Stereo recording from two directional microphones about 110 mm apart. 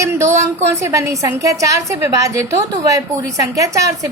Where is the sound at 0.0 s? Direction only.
25° right (ahead or behind).